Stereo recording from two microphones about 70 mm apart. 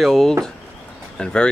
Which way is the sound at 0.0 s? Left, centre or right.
Centre.